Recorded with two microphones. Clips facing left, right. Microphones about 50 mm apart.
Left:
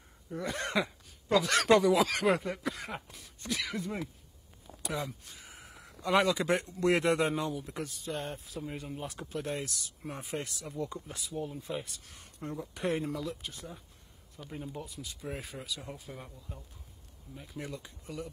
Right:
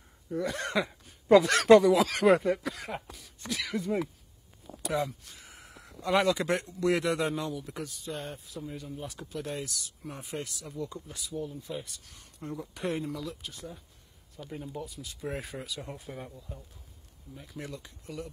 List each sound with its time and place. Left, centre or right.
0.3 s speech: centre
6.6 s speech: left
7.4 s speech: centre
8.5 s speech: left
9.0 s speech: left
9.5 s speech: centre
12.4 s speech: centre
17.4 s speech: centre